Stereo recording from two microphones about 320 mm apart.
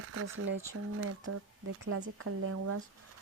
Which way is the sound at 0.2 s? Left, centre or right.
Right.